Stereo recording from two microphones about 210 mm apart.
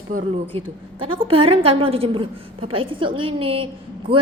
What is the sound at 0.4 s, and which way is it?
A woman's voice, 25° right (ahead or behind).